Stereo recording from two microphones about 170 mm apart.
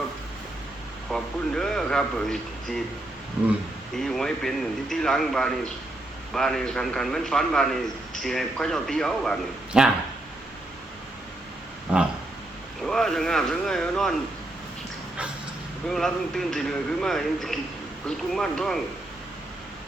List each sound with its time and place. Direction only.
1.1 s a man's voice: 5° left (ahead or behind)
3.9 s a man's voice: centre (ahead or behind)
12.8 s a sound: 5° left (ahead or behind)
15.9 s a man's voice: 5° left (ahead or behind)